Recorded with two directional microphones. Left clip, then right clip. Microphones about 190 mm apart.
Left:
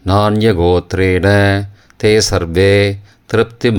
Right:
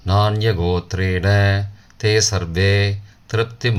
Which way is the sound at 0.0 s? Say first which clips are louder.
Left 7 dB; 45° left (ahead or behind).